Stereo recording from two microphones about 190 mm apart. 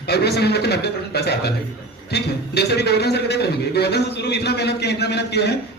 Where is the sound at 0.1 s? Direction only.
60° left (ahead or behind).